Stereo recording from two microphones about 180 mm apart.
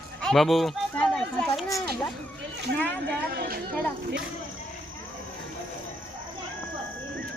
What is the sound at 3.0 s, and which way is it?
Speech, 60° right (ahead or behind).